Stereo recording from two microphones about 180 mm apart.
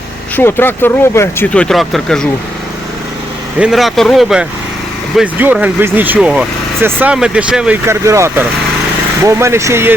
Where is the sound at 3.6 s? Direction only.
Centre (ahead or behind).